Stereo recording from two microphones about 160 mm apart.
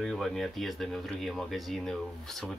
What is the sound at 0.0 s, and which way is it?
Speech, centre (ahead or behind).